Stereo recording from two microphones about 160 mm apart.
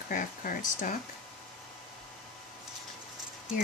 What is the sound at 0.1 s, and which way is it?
Speech, 55° left (ahead or behind).